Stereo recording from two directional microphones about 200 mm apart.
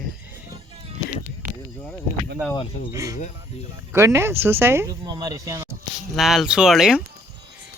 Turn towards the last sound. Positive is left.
turn(degrees=-5)  # may be behind; listen again after turning